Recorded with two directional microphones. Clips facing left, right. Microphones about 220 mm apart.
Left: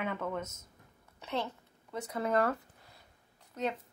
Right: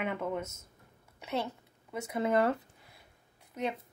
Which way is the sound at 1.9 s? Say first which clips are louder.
Right 2 dB; 10° right (ahead or behind).